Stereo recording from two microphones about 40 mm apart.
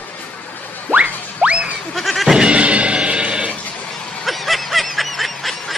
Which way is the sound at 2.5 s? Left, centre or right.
Right.